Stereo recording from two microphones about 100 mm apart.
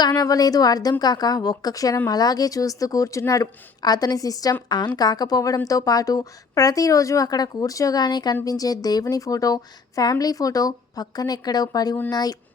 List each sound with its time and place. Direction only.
0.0 s a woman's voice: 40° left (ahead or behind)